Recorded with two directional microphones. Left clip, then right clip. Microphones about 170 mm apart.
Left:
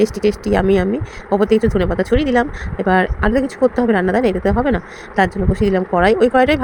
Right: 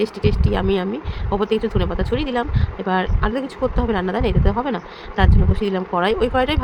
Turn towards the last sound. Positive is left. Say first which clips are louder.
# left 6 dB
turn(degrees=30)  # may be behind; listen again after turning